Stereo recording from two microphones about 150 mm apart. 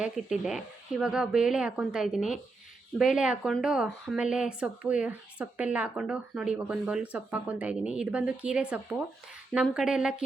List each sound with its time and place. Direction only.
0.0 s speech: 5° right (ahead or behind)